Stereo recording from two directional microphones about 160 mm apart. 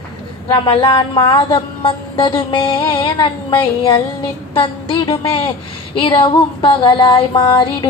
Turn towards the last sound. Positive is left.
turn(degrees=30)  # may be behind; listen again after turning